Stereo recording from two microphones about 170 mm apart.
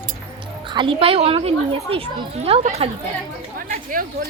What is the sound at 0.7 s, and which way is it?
A child's voice, 30° right (ahead or behind).